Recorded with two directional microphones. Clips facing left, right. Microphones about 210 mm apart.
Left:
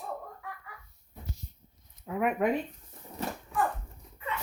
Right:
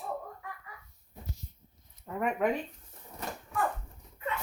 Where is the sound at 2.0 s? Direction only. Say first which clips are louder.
Left 3 dB; 5° left (ahead or behind).